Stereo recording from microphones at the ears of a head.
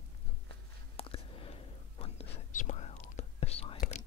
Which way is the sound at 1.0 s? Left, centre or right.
Left.